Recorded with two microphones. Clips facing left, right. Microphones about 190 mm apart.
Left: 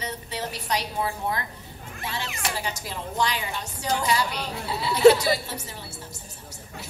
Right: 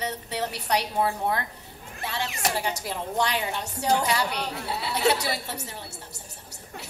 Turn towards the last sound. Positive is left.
turn(degrees=-65)  # may be behind; listen again after turning